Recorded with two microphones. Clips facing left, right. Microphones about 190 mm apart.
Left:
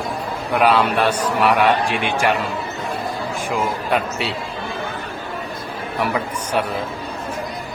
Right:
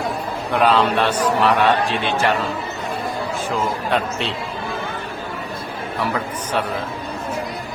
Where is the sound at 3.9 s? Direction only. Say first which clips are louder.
Even; 10° left (ahead or behind).